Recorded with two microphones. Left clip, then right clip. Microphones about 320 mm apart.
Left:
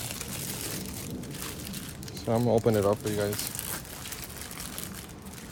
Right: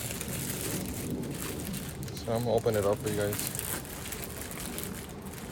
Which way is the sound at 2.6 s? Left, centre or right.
Centre.